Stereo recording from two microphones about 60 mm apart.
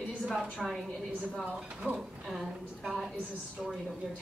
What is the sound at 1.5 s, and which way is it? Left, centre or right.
Speech, centre.